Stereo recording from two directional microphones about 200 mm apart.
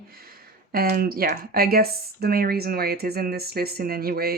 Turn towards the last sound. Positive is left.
turn(degrees=-50)  # may be behind; listen again after turning